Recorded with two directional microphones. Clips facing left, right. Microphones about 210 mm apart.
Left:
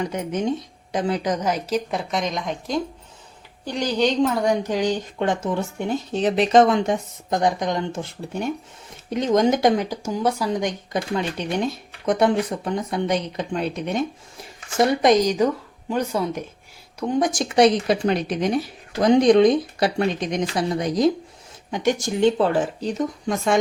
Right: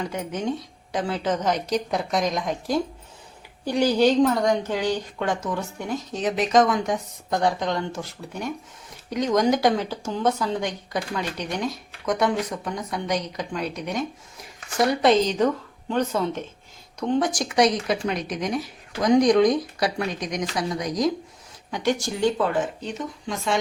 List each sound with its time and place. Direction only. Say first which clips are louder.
0.0 s a woman's voice: left 3 dB; 20° left (ahead or behind); by 4.2 s 10° right (ahead or behind)
4.2 s speech: even; 5° left (ahead or behind); by 14.0 s 25° left (ahead or behind)
14.8 s speech: left 2 dB; 15° left (ahead or behind); by 23.6 s 40° left (ahead or behind)